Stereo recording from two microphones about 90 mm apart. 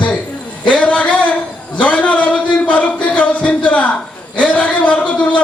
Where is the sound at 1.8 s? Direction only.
15° left (ahead or behind).